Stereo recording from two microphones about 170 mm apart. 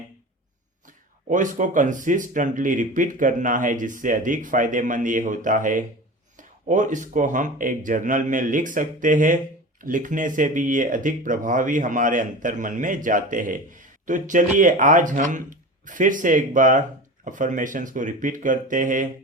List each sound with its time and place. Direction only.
1.3 s speech: 50° right (ahead or behind)